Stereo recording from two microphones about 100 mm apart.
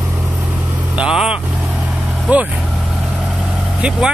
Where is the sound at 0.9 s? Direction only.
10° right (ahead or behind).